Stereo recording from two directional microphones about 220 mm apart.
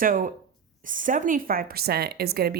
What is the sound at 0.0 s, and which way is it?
A woman's voice, 40° right (ahead or behind).